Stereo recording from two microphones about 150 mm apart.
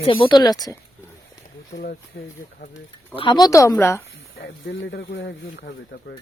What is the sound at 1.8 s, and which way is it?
Speech, 80° left.